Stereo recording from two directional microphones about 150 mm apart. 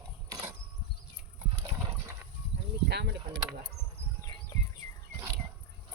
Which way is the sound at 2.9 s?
90° right.